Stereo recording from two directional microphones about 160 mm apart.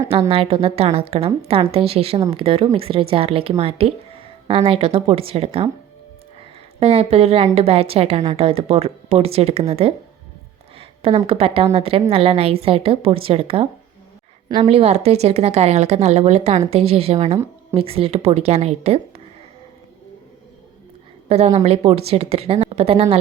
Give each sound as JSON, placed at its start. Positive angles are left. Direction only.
{"t": 0.1, "sound": "a woman's voice", "side_deg": -35}
{"t": 6.7, "sound": "a woman's voice", "side_deg": -40}
{"t": 14.7, "sound": "a woman's voice", "side_deg": -40}
{"t": 21.2, "sound": "a woman's voice", "side_deg": -40}